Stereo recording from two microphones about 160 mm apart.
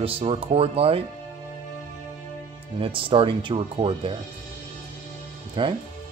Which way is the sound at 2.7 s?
35° right (ahead or behind).